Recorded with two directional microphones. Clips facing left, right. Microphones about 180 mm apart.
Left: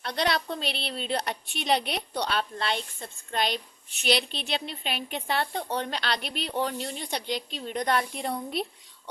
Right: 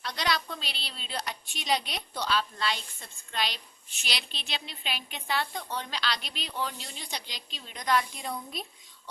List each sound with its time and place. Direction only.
0.0 s a woman's voice: 55° left (ahead or behind)